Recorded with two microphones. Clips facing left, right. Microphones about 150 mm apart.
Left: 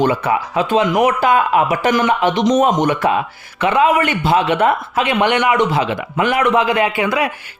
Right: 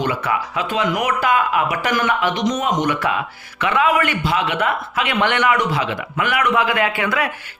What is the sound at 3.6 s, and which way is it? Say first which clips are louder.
Speech: left 4 dB; 25° left (ahead or behind).